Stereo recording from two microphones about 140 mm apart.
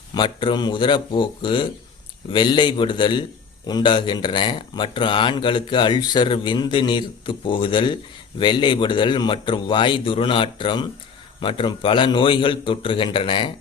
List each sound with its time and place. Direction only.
0.1 s speech: 35° left (ahead or behind)